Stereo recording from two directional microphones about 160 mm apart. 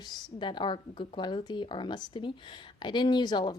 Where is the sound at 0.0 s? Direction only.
25° left (ahead or behind).